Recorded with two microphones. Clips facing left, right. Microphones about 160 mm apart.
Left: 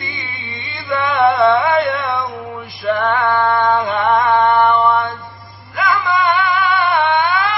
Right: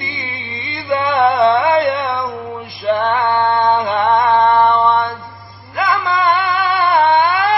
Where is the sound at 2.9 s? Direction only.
20° right (ahead or behind).